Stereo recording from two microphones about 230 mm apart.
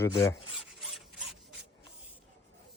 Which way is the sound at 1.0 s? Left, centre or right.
Centre.